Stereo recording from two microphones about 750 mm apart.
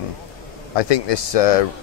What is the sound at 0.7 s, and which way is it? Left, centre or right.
Speech, left.